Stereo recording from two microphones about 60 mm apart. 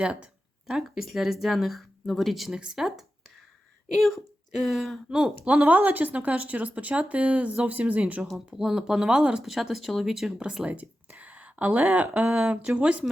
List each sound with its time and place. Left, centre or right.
0.0 s speech: right
0.7 s speech: centre
5.5 s speech: right
8.5 s speech: centre
9.4 s speech: centre
11.2 s a sound: right
12.1 s speech: centre